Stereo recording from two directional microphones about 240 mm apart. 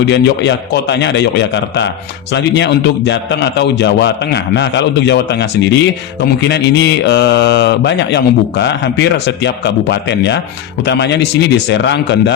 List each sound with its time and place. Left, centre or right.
0.0 s speech: left